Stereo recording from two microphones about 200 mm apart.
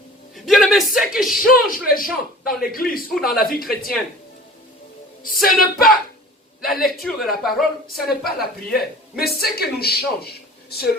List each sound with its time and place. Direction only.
0.3 s a man's voice: centre (ahead or behind)
1.5 s speech: 45° left (ahead or behind)
3.1 s speech: centre (ahead or behind)
3.3 s speech: 45° left (ahead or behind)
5.2 s speech: 45° left (ahead or behind)
7.0 s speech: centre (ahead or behind)
8.2 s speech: 50° left (ahead or behind)